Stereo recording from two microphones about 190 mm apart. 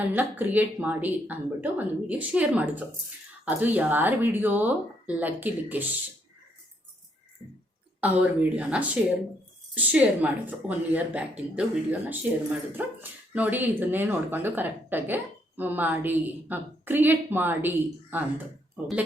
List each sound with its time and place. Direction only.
0.1 s speech: 10° right (ahead or behind)
8.0 s speech: 10° right (ahead or behind)